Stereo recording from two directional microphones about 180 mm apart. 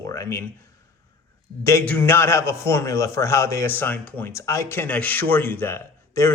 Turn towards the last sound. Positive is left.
turn(degrees=15)  # may be behind; listen again after turning